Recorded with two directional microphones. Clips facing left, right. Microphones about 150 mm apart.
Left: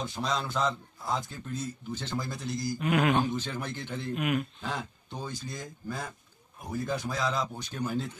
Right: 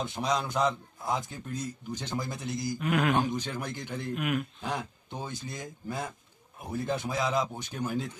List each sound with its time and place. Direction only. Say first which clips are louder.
0.0 s a man's voice: right 2 dB; 20° right (ahead or behind)
2.8 s speech: left 1 dB; centre (ahead or behind)
3.2 s a man's voice: even; 15° right (ahead or behind)
4.1 s speech: left 1 dB; centre (ahead or behind)
4.6 s a man's voice: right 1 dB; 20° right (ahead or behind)